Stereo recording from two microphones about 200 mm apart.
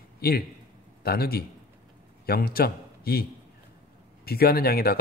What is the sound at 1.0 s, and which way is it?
A man's voice, 50° left (ahead or behind).